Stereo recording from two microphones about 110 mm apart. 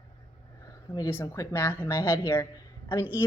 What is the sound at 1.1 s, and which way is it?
A woman's voice, 25° left (ahead or behind).